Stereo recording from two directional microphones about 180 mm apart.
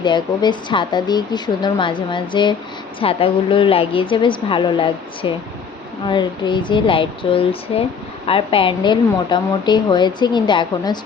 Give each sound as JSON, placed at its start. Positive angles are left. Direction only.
{"t": 0.0, "sound": "a woman's voice", "side_deg": 25}